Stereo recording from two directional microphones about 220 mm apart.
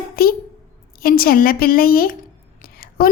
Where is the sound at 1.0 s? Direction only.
40° left (ahead or behind).